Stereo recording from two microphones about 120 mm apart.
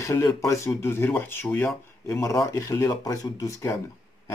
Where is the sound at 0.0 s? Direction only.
25° left (ahead or behind).